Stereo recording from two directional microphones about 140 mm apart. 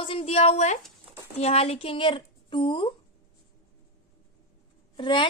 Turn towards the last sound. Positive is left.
turn(degrees=35)  # may be behind; listen again after turning